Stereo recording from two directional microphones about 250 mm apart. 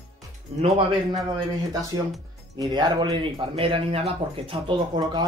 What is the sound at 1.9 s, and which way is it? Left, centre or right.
Speech, centre.